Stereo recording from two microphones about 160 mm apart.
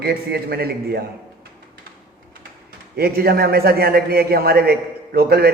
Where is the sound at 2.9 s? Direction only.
75° right (ahead or behind).